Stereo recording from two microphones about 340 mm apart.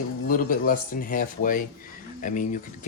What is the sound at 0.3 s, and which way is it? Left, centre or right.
Speech, left.